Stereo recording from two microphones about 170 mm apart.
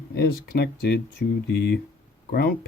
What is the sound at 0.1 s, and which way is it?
Speech, 70° left (ahead or behind).